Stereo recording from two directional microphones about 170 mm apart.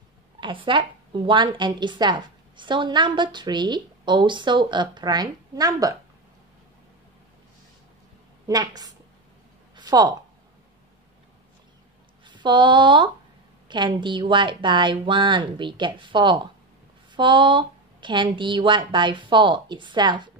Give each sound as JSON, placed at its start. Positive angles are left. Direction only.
{"t": 0.4, "sound": "a woman's voice", "side_deg": -30}
{"t": 8.5, "sound": "a woman's voice", "side_deg": -20}
{"t": 9.8, "sound": "a sound", "side_deg": -25}
{"t": 12.3, "sound": "a woman's voice", "side_deg": -25}